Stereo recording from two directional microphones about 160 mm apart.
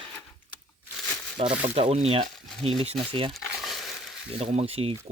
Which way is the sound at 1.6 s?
40° right (ahead or behind).